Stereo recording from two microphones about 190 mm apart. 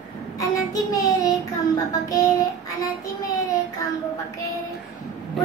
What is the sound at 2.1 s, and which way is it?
Speech, 15° left (ahead or behind).